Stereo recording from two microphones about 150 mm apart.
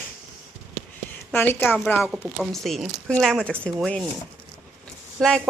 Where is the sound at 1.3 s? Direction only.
15° left (ahead or behind).